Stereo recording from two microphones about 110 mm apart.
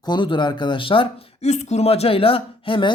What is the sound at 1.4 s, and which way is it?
Speech, 90° left.